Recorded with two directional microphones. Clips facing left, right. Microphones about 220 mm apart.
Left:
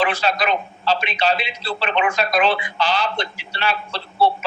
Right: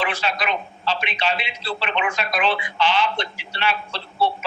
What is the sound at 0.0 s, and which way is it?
A man's voice, 40° left (ahead or behind).